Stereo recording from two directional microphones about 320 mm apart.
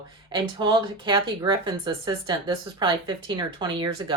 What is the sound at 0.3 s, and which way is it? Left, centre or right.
Speech, centre.